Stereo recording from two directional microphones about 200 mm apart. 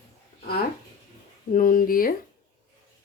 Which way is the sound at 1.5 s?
45° left (ahead or behind).